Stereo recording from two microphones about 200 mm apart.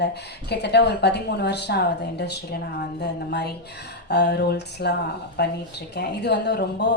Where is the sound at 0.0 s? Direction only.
55° left (ahead or behind).